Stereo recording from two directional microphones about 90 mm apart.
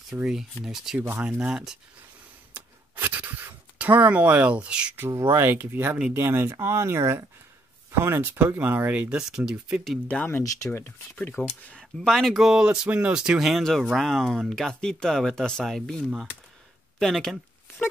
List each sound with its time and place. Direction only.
0.1 s speech: 5° right (ahead or behind)
0.9 s speech: 15° right (ahead or behind)
1.4 s speech: 5° right (ahead or behind)
2.5 s speech: 20° right (ahead or behind)
5.0 s speech: 30° right (ahead or behind)
9.5 s speech: 10° right (ahead or behind)
10.0 s speech: 20° left (ahead or behind)
11.6 s speech: 10° left (ahead or behind)